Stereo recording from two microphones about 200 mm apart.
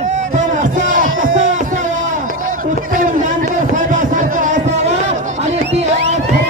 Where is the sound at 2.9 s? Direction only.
40° right (ahead or behind).